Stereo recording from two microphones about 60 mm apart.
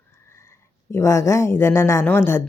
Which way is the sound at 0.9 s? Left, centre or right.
Left.